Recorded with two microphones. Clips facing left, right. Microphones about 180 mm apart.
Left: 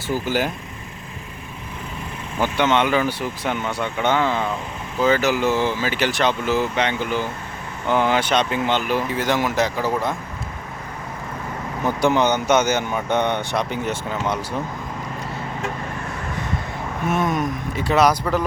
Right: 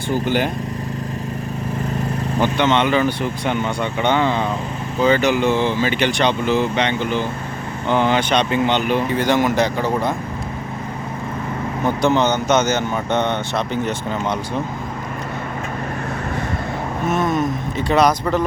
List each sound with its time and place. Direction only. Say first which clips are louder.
0.1 s speech: right 3 dB; 5° left (ahead or behind)
2.4 s speech: right 1 dB; 10° left (ahead or behind)
12.0 s speech: right 1 dB; 10° left (ahead or behind)
17.1 s speech: right 2 dB; 10° left (ahead or behind)